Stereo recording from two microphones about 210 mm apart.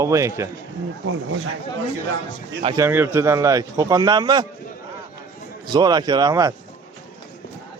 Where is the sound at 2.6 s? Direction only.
25° right (ahead or behind).